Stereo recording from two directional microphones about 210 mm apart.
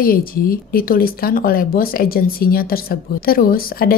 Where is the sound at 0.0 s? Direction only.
45° left (ahead or behind).